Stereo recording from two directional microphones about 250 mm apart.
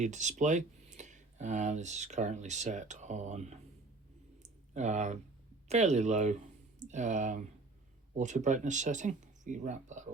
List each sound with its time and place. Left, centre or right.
0.0 s speech: right
4.7 s speech: right